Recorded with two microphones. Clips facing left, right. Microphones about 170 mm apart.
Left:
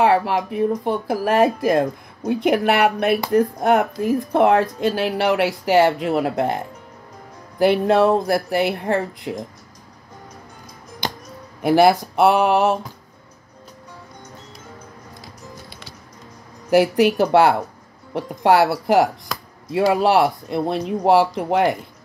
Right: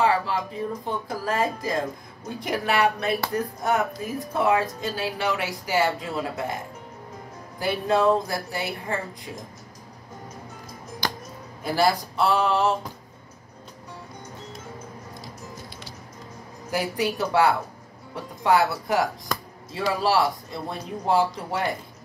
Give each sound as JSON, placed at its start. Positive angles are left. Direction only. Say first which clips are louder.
{"t": 0.0, "sound": "speech", "louder": "left 6 dB", "side_deg": 65}
{"t": 11.6, "sound": "speech", "louder": "left 8 dB", "side_deg": 65}
{"t": 12.2, "sound": "a sound", "louder": "left 6 dB", "side_deg": 65}
{"t": 16.7, "sound": "speech", "louder": "left 11 dB", "side_deg": 75}